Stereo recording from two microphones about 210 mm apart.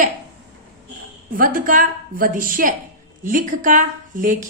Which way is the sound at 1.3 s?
40° right (ahead or behind).